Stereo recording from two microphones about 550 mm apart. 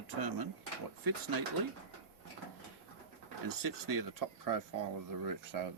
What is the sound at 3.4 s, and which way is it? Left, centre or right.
Speech, right.